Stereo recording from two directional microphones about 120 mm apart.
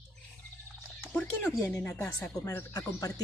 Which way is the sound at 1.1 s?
10° left (ahead or behind).